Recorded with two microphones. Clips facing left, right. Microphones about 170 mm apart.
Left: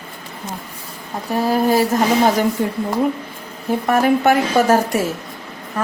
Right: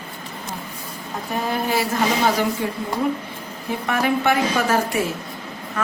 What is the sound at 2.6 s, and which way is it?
Speech, 45° left (ahead or behind).